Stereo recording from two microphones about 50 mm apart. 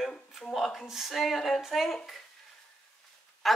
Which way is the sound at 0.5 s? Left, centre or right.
Centre.